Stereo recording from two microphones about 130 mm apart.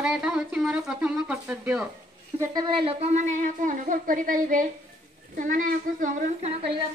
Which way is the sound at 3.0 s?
65° right (ahead or behind).